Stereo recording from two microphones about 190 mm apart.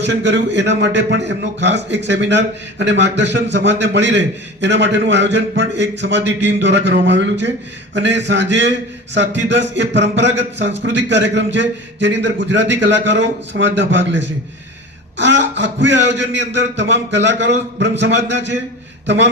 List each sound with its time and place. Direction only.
0.0 s a man's voice: 65° right (ahead or behind)